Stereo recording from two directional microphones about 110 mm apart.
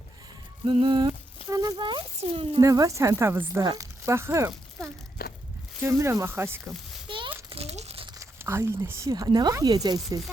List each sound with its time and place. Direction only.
0.6 s speech: 50° right (ahead or behind)
1.5 s speech: 35° right (ahead or behind); by 2.6 s 60° right (ahead or behind)
2.6 s speech: 30° right (ahead or behind)
5.8 s speech: 25° right (ahead or behind)
7.5 s crumpling: 70° right (ahead or behind)
8.2 s speech: 25° right (ahead or behind)